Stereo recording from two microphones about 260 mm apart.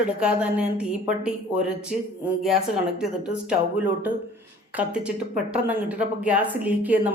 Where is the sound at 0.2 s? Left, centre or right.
Centre.